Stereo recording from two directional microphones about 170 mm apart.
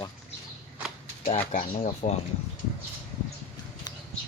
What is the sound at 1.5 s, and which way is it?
Speech, 45° left (ahead or behind).